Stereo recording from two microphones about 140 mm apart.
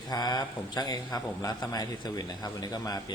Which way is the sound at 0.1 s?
30° left (ahead or behind).